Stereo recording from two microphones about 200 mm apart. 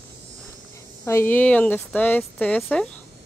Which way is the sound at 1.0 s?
10° left (ahead or behind).